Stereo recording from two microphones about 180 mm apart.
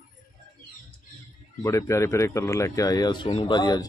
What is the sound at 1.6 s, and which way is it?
Speech, 15° left (ahead or behind).